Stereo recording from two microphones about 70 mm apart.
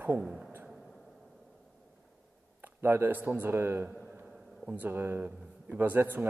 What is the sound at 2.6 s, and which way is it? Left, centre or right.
A man's voice, right.